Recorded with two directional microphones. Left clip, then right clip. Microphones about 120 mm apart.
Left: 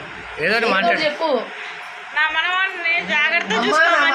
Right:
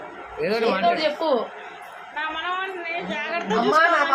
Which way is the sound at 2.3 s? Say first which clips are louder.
Left 8 dB; 55° right (ahead or behind).